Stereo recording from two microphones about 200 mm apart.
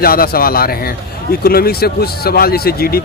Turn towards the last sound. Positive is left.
turn(degrees=50)  # may be behind; listen again after turning